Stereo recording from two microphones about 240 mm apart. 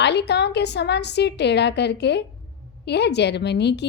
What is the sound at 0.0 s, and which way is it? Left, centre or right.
A woman's voice, left.